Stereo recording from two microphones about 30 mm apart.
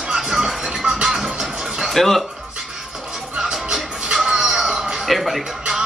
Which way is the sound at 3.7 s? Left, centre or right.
Centre.